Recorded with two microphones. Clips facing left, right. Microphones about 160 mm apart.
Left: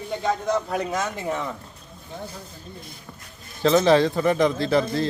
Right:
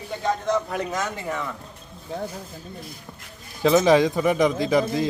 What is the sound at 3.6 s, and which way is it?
Speech, 10° right (ahead or behind).